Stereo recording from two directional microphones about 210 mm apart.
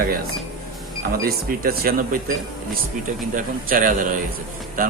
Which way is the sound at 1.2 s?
45° right (ahead or behind).